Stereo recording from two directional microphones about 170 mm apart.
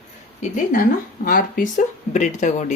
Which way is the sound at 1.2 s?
55° left (ahead or behind).